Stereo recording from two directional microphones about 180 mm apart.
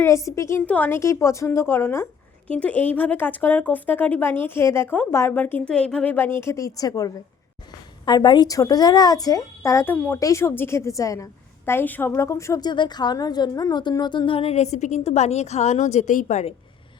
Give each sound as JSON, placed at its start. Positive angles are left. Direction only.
{"t": 0.0, "sound": "a woman's voice", "side_deg": 15}